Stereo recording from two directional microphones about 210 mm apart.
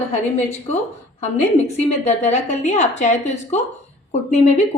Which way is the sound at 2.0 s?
30° left (ahead or behind).